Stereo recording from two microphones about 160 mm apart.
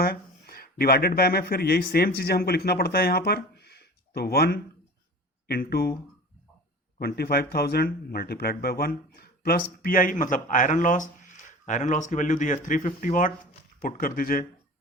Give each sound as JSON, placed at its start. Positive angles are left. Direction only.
{"t": 0.0, "sound": "speech", "side_deg": 70}
{"t": 7.0, "sound": "speech", "side_deg": 80}